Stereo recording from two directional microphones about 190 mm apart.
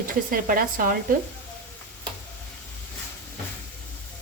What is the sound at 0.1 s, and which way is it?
Speech, 45° right (ahead or behind).